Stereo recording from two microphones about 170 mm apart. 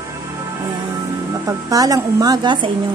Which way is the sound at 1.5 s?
20° right (ahead or behind).